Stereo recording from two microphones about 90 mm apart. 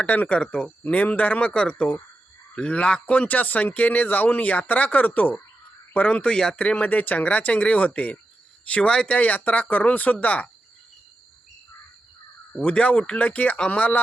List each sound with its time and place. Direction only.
0.0 s speech: 15° left (ahead or behind)
12.5 s speech: 15° left (ahead or behind)